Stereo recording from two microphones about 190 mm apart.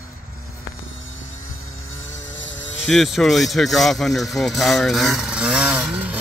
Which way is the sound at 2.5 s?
80° left.